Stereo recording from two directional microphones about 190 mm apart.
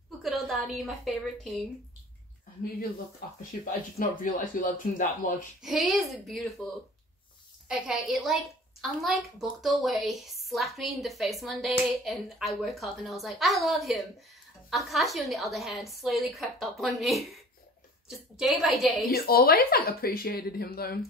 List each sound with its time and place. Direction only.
0.2 s a woman's voice: centre (ahead or behind)
4.1 s speech: 45° left (ahead or behind)
5.6 s a woman's voice: centre (ahead or behind)
7.6 s a woman's voice: 5° right (ahead or behind)
18.4 s a woman's voice: centre (ahead or behind)
19.1 s speech: 50° left (ahead or behind)